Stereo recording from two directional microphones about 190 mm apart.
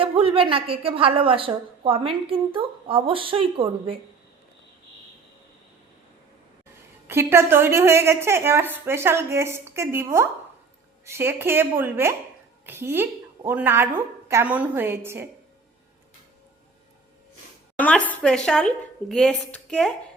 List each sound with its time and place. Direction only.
0.0 s a woman's voice: 30° right (ahead or behind)
7.1 s a woman's voice: 10° right (ahead or behind)
17.7 s a woman's voice: 5° left (ahead or behind)